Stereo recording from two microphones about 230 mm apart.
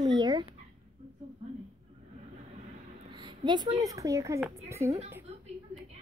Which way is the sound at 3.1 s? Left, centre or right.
Centre.